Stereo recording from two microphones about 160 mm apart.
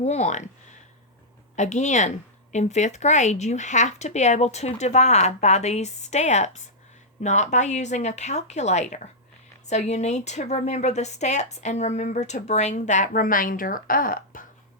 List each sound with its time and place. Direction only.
0.0 s speech: 45° left (ahead or behind)
1.5 s speech: 45° left (ahead or behind)